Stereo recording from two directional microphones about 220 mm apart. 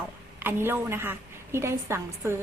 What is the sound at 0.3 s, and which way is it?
A woman's voice, 10° right (ahead or behind).